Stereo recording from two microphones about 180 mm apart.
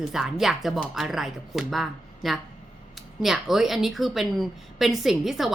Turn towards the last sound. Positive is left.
turn(degrees=0)  # may be behind; listen again after turning